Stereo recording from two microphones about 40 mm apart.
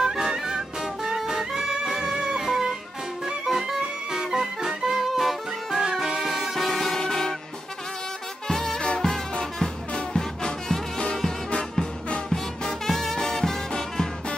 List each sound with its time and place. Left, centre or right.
0.0 s music: centre
7.0 s music: centre
8.5 s music: centre
12.3 s music: centre